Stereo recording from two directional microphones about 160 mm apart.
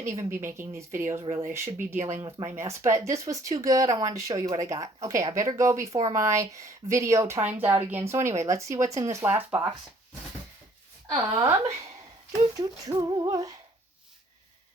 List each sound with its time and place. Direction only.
0.1 s speech: 20° right (ahead or behind)
1.2 s speech: 35° right (ahead or behind)
1.5 s speech: 15° right (ahead or behind)
11.3 s speech: 20° right (ahead or behind)